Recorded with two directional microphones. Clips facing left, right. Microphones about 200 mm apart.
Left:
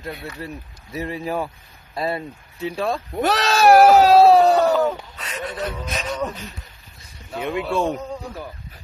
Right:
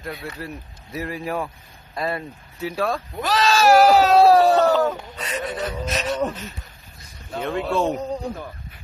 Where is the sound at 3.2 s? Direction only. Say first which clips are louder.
Left 1 dB; 65° left (ahead or behind).